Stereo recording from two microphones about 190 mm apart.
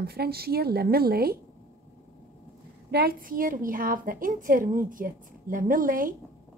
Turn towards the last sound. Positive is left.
turn(degrees=-45)  # may be behind; listen again after turning